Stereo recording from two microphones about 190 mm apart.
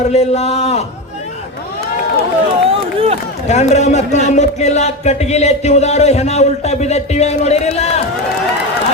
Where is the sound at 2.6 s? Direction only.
30° right (ahead or behind).